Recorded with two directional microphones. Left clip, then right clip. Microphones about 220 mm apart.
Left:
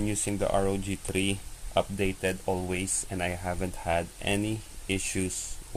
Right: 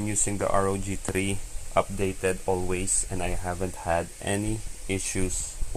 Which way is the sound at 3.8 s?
10° right (ahead or behind).